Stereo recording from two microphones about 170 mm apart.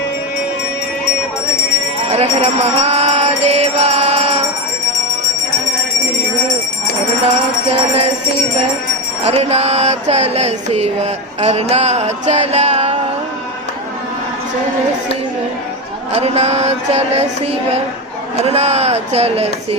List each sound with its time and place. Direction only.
2.1 s mantra: 40° right (ahead or behind)
7.3 s mantra: 35° right (ahead or behind)
9.2 s mantra: 35° right (ahead or behind)
16.2 s mantra: 40° right (ahead or behind)
18.4 s mantra: 40° right (ahead or behind)